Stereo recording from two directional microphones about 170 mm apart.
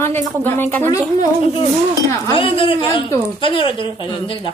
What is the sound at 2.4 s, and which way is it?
Speech, 30° left (ahead or behind).